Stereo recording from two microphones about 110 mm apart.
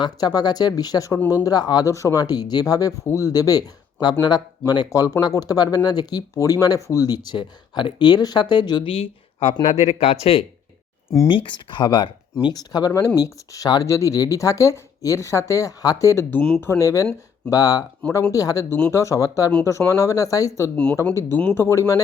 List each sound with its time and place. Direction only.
0.0 s speech: 40° left (ahead or behind)
8.9 s speech: 60° left (ahead or behind)
11.3 s speech: 50° left (ahead or behind); by 16.2 s 30° left (ahead or behind)
16.3 s speech: 15° left (ahead or behind)
16.6 s speech: 25° left (ahead or behind)